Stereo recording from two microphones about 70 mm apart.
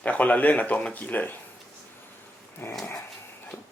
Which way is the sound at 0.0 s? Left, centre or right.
Left.